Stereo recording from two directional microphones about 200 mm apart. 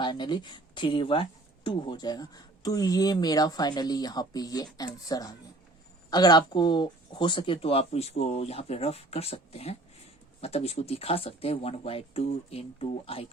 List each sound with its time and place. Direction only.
0.0 s speech: 20° left (ahead or behind)